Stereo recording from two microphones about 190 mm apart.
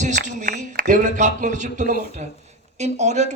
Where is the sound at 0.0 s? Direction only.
40° right (ahead or behind).